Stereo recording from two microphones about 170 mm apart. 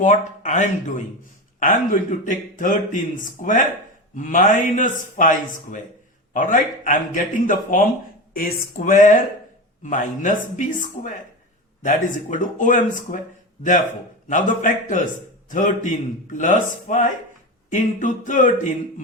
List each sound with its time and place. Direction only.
0.0 s a man's voice: 45° left (ahead or behind)
4.1 s a man's voice: 50° left (ahead or behind)
14.3 s a man's voice: 50° left (ahead or behind)